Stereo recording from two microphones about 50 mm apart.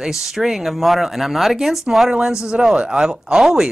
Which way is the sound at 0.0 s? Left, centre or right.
Centre.